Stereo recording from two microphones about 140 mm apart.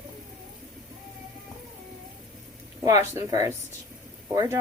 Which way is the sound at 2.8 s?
20° right (ahead or behind).